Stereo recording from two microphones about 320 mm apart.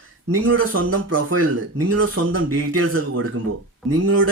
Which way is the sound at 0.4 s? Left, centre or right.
Right.